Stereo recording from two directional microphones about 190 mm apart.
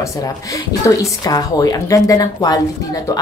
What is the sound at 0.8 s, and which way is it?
A woman's voice, 15° left (ahead or behind).